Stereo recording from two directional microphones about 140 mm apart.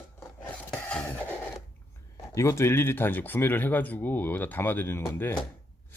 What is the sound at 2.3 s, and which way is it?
Speech, 20° left (ahead or behind).